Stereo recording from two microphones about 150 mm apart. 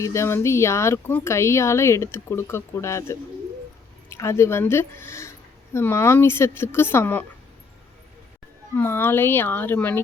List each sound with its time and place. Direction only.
0.0 s a woman's voice: 20° left (ahead or behind)
8.7 s a woman's voice: 15° left (ahead or behind)